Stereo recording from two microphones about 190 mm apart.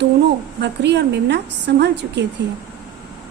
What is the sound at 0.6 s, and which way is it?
A woman's voice, 65° right (ahead or behind).